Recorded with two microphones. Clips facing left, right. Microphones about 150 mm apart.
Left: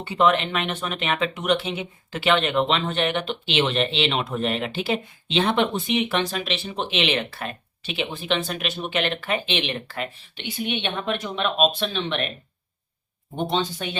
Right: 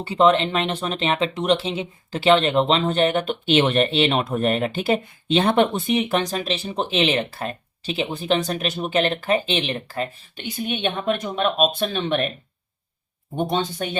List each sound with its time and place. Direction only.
0.1 s speech: 30° right (ahead or behind); by 12.2 s 45° right (ahead or behind)
13.5 s speech: 50° right (ahead or behind)